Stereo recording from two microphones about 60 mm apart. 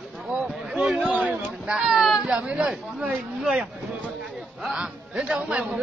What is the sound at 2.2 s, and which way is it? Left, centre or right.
A man's voice, right.